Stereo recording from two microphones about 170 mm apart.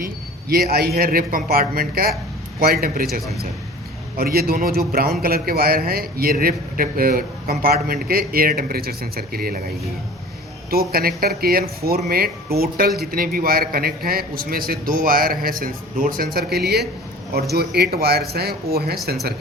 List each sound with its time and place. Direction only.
0.0 s speech: 65° right (ahead or behind)
10.7 s speech: 65° right (ahead or behind)